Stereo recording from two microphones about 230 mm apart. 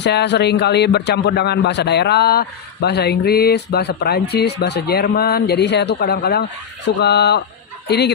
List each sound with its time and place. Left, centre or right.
0.0 s a man's voice: left